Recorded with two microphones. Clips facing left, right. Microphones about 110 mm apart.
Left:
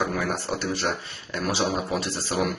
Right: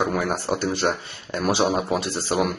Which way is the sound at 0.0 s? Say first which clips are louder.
Right 3 dB; 25° right (ahead or behind).